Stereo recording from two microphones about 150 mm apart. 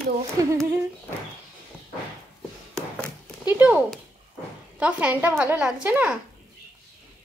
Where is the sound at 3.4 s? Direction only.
10° right (ahead or behind).